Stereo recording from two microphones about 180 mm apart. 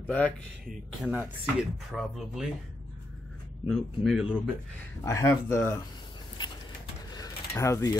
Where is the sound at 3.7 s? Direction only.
5° right (ahead or behind).